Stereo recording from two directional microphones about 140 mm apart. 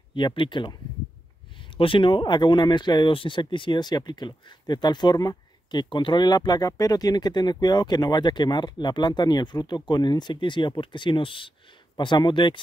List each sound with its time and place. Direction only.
0.1 s speech: 35° left (ahead or behind)
1.8 s speech: 40° left (ahead or behind)